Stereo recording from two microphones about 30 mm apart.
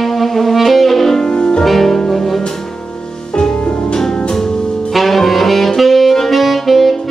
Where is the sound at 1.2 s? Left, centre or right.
Left.